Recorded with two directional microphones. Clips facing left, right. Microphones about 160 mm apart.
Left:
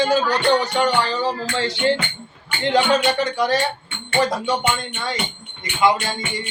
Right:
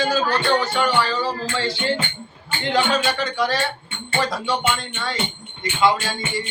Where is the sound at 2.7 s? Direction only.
20° left (ahead or behind).